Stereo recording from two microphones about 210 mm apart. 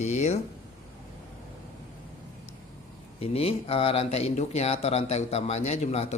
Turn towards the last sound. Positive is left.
turn(degrees=30)  # may be behind; listen again after turning